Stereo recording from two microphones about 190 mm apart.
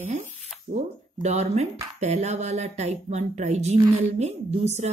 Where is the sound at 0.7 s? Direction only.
35° right (ahead or behind).